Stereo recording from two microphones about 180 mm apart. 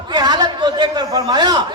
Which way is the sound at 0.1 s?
25° right (ahead or behind).